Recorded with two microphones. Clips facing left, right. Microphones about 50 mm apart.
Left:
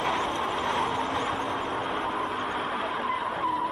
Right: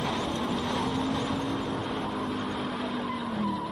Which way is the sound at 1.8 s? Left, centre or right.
Centre.